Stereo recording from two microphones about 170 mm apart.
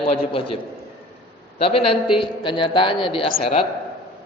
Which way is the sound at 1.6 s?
35° left (ahead or behind).